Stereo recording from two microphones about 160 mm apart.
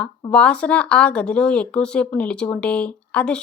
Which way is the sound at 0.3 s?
5° left (ahead or behind).